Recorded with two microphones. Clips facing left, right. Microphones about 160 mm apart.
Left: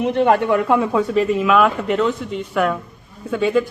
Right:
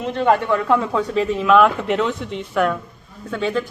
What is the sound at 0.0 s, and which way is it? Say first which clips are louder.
A man's voice: left 2 dB; 15° left (ahead or behind).